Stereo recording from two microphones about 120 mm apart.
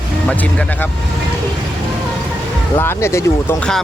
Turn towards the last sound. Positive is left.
turn(degrees=25)  # may be behind; listen again after turning